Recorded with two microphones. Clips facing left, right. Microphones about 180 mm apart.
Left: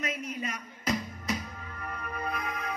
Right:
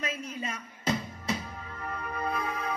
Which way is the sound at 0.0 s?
30° right (ahead or behind).